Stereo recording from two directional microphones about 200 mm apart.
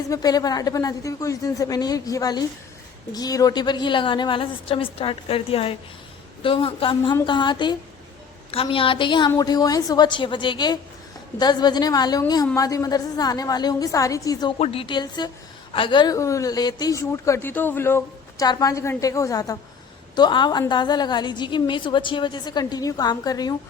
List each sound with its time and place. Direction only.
0.1 s a woman's voice: 20° left (ahead or behind)
14.6 s a woman's voice: 30° left (ahead or behind)